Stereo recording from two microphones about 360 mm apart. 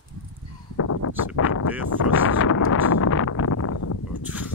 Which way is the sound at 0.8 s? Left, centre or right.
Left.